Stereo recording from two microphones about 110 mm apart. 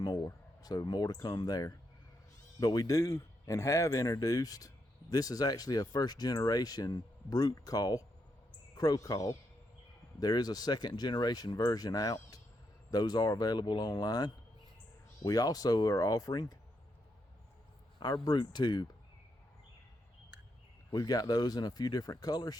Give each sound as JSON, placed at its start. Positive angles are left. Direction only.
{"t": 0.3, "sound": "a man's voice", "side_deg": 35}
{"t": 18.0, "sound": "a man's voice", "side_deg": 40}
{"t": 20.9, "sound": "a man's voice", "side_deg": 35}